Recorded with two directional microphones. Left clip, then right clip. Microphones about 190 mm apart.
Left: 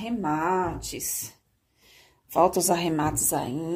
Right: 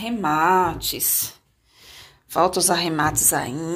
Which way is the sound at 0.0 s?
10° right (ahead or behind).